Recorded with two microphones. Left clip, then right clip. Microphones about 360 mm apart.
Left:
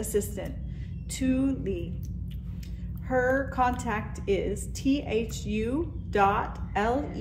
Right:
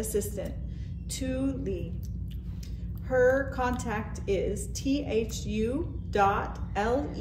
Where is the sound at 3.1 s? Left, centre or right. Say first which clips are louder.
Right 2 dB; left.